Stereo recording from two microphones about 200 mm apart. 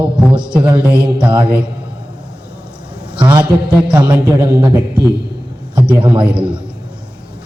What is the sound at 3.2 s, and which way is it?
A man's voice, 20° right (ahead or behind).